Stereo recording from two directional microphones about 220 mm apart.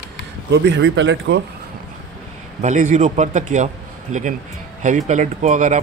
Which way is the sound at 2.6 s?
35° right (ahead or behind).